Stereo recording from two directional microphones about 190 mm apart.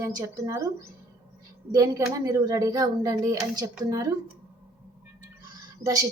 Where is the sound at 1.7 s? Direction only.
15° right (ahead or behind).